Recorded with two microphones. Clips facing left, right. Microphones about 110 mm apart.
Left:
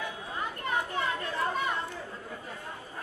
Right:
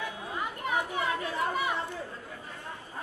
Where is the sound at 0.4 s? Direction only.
10° right (ahead or behind).